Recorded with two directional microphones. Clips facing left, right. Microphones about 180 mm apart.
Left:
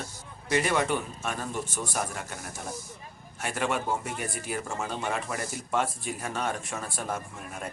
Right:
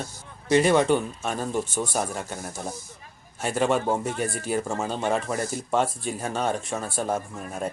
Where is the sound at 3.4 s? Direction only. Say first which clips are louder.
Right 6 dB; 30° right (ahead or behind).